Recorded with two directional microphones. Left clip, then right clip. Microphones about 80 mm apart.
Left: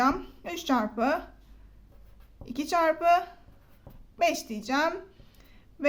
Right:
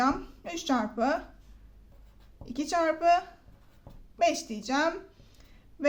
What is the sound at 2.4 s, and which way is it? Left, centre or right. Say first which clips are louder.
Speech: left 2 dB; centre.